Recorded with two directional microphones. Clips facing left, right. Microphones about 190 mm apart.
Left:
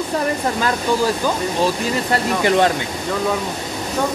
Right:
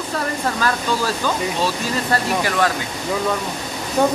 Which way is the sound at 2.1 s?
25° left (ahead or behind).